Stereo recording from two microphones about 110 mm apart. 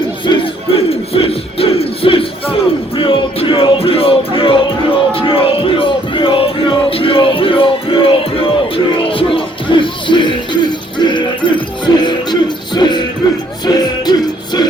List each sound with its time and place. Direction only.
0.3 s crowd: 55° left (ahead or behind)
5.1 s music: 55° left (ahead or behind)